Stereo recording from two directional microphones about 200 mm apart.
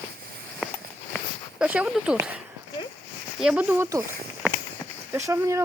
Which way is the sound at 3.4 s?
5° right (ahead or behind).